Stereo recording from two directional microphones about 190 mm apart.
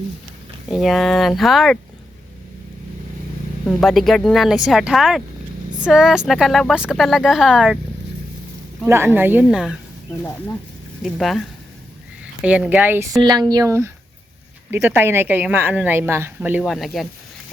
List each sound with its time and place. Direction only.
0.7 s speech: centre (ahead or behind)
3.8 s speech: centre (ahead or behind)
8.9 s speech: 10° right (ahead or behind)
11.0 s speech: centre (ahead or behind)